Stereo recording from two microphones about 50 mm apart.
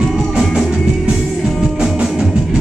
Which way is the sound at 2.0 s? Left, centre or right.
Centre.